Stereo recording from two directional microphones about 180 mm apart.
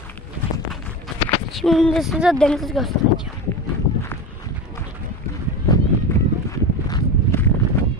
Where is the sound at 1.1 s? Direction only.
Centre (ahead or behind).